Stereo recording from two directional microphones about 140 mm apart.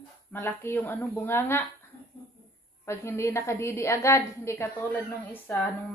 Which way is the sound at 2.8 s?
15° left (ahead or behind).